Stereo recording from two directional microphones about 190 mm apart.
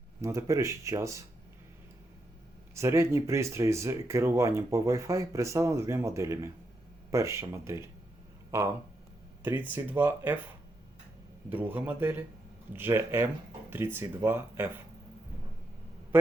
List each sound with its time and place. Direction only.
0.2 s speech: 15° right (ahead or behind)
2.7 s speech: 15° right (ahead or behind)
11.4 s speech: 10° right (ahead or behind)